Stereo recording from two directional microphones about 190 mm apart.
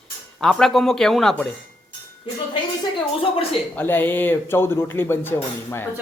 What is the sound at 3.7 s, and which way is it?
Speech, 10° left (ahead or behind).